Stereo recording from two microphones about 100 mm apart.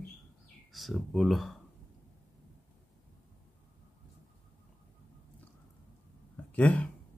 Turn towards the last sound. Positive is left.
turn(degrees=15)  # may be behind; listen again after turning